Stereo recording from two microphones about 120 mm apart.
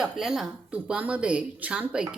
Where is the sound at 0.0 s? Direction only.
5° right (ahead or behind).